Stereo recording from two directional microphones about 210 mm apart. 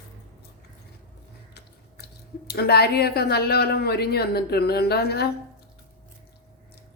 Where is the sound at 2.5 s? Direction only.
50° left (ahead or behind).